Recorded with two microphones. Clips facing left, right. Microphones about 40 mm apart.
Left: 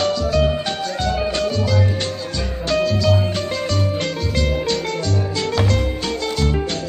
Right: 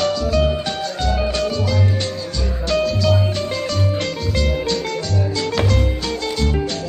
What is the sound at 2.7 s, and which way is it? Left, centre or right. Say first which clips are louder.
Music: even; left.